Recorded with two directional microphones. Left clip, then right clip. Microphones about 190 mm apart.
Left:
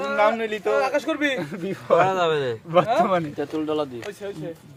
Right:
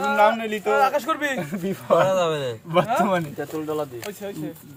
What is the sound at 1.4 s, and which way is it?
Speech, 35° left (ahead or behind).